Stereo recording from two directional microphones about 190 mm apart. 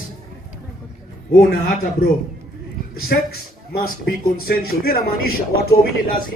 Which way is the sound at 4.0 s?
50° left (ahead or behind).